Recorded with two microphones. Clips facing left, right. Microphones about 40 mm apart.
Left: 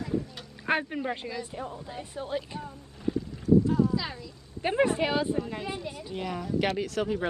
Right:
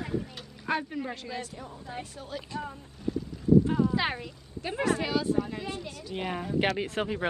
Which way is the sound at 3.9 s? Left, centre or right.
Right.